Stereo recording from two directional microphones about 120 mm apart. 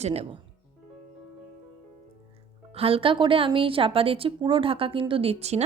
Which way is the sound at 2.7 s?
50° right (ahead or behind).